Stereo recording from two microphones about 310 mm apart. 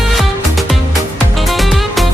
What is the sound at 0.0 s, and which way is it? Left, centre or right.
Music, centre.